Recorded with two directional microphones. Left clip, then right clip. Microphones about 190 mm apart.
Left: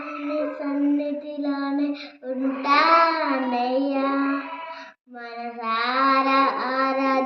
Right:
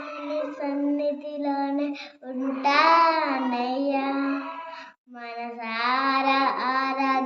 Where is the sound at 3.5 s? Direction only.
55° right (ahead or behind).